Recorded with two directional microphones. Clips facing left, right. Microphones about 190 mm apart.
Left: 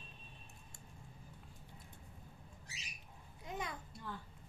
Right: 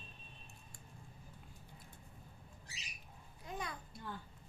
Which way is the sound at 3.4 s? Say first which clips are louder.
Left 1 dB; 20° left (ahead or behind).